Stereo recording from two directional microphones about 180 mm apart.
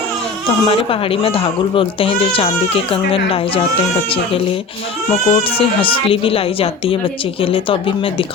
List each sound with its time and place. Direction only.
0.6 s speech: 30° left (ahead or behind)
5.3 s speech: 30° left (ahead or behind)